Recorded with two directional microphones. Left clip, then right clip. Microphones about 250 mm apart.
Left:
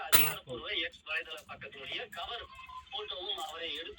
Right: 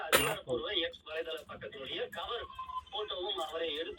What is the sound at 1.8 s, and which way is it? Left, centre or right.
Speech, left.